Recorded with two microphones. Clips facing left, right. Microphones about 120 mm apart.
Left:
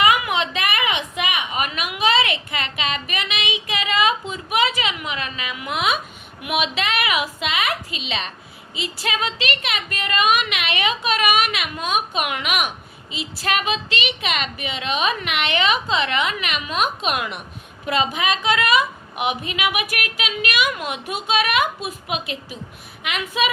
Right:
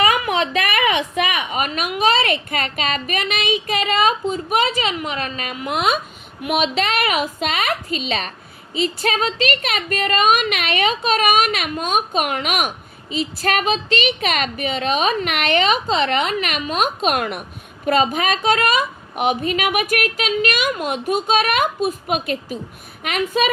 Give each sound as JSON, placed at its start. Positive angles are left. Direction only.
{"t": 0.0, "sound": "a woman's voice", "side_deg": -35}